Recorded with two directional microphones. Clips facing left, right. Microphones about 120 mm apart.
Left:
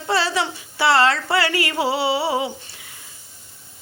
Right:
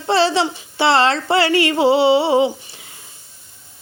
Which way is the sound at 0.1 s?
25° right (ahead or behind).